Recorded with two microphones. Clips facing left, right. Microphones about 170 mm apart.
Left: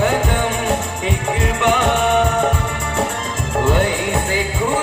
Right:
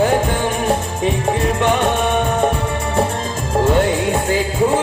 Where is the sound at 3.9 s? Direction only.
30° right (ahead or behind).